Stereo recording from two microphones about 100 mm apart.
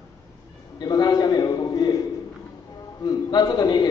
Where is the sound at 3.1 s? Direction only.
45° left (ahead or behind).